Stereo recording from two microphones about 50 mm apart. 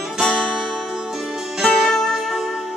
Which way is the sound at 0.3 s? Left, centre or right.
Left.